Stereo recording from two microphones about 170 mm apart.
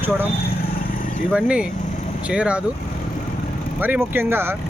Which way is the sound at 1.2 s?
5° right (ahead or behind).